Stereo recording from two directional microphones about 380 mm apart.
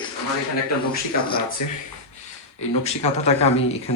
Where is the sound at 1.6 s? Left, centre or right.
Left.